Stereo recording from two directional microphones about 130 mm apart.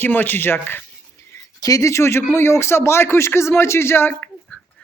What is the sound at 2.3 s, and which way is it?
Speech, 20° left (ahead or behind).